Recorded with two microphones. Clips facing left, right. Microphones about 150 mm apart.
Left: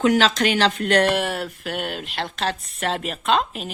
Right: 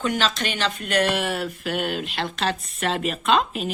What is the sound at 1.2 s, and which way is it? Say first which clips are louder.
Speech: even; 35° left (ahead or behind).